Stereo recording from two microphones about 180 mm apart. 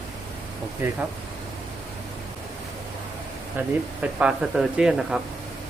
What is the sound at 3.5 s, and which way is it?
Speech, 5° right (ahead or behind).